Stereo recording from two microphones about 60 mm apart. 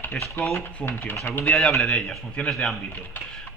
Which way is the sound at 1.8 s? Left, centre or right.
Centre.